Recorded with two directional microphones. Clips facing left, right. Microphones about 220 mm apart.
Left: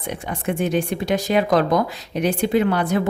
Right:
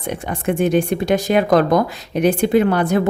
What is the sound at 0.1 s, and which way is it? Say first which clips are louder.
A woman's voice: right 4 dB; 50° right (ahead or behind).